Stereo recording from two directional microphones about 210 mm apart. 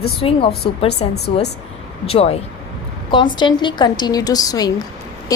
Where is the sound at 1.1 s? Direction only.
50° left (ahead or behind).